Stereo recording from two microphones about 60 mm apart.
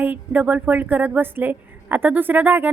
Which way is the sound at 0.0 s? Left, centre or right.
Right.